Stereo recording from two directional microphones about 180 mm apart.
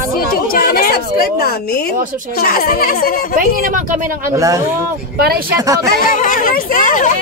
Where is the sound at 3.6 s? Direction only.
50° right (ahead or behind).